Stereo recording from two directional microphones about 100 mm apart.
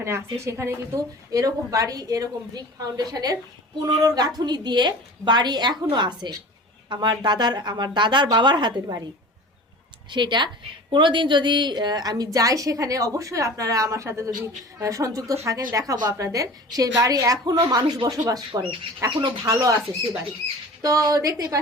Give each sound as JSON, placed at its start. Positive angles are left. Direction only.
{"t": 0.4, "sound": "a woman's voice", "side_deg": -25}
{"t": 10.1, "sound": "a woman's voice", "side_deg": -50}